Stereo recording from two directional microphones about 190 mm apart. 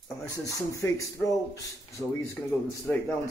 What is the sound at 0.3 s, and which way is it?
A man's voice, 15° left (ahead or behind).